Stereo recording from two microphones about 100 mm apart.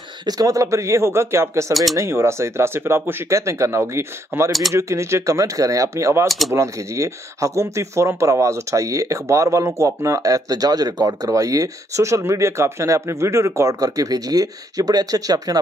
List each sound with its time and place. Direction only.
0.3 s speech: 35° right (ahead or behind)
4.5 s speech: centre (ahead or behind)
4.7 s speech: 30° right (ahead or behind)